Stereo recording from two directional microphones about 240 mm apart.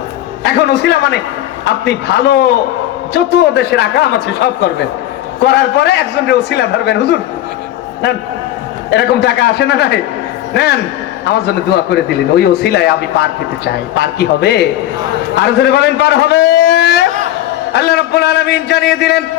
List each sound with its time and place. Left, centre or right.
0.4 s a man's voice: left
5.5 s a man's voice: left
8.9 s a man's voice: left